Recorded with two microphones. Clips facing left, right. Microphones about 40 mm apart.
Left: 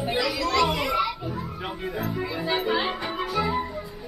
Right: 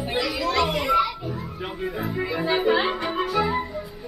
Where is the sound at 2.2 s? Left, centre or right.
Centre.